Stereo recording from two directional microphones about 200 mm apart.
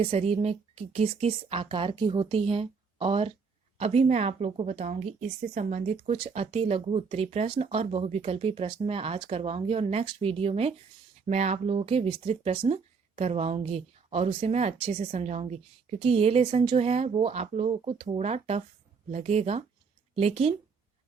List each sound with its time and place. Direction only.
0.0 s a woman's voice: 30° right (ahead or behind)